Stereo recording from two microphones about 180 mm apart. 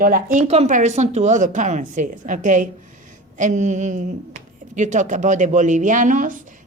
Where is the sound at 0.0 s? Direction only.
50° right (ahead or behind).